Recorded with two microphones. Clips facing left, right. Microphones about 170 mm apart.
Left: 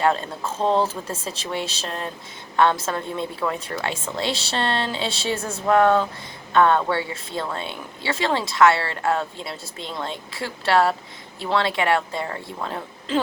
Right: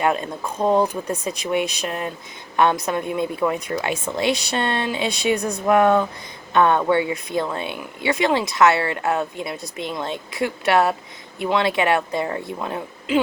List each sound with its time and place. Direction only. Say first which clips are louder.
0.0 s a woman's voice: even; 15° right (ahead or behind)